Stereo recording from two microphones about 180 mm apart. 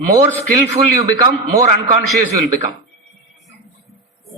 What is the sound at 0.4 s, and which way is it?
A man's voice, 45° right (ahead or behind).